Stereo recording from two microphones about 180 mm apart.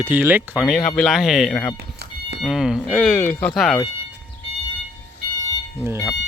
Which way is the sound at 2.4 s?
Centre (ahead or behind).